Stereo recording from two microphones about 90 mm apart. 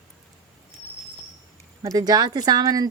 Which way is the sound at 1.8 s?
45° right (ahead or behind).